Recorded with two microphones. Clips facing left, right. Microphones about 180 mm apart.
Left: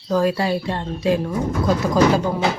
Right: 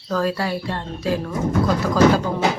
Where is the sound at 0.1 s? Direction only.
15° left (ahead or behind).